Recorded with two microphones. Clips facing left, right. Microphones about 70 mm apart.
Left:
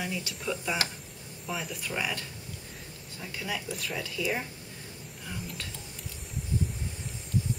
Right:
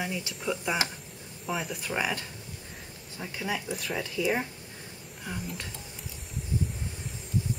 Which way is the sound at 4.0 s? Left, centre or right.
Right.